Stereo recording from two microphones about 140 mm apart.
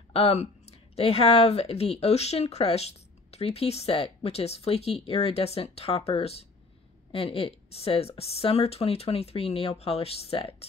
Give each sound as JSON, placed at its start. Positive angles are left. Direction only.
{"t": 0.1, "sound": "speech", "side_deg": 45}